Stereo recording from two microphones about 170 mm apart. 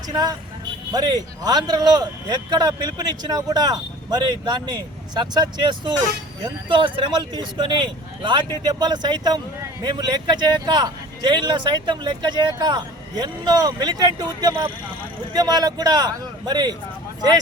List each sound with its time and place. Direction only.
0.9 s a man's voice: 25° right (ahead or behind)